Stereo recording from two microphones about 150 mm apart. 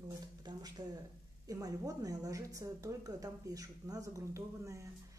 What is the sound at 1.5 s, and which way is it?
A woman's voice, 20° right (ahead or behind).